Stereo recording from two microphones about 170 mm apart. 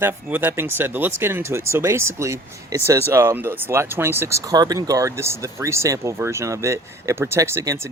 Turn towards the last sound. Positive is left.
turn(degrees=-15)  # may be behind; listen again after turning